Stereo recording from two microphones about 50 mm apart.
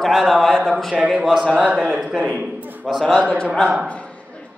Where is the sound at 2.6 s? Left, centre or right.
Right.